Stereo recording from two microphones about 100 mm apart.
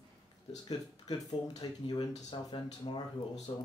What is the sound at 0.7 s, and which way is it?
Speech, 40° left (ahead or behind).